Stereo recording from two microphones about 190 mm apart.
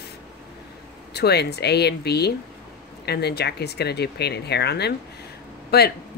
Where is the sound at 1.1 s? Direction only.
60° left (ahead or behind).